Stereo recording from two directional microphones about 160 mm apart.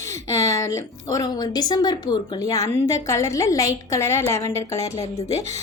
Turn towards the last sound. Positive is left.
turn(degrees=20)  # may be behind; listen again after turning